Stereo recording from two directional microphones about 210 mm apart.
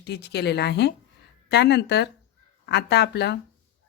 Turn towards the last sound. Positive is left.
turn(degrees=50)  # may be behind; listen again after turning